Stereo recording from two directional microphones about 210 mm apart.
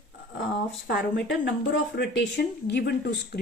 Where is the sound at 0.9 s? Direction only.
55° left (ahead or behind).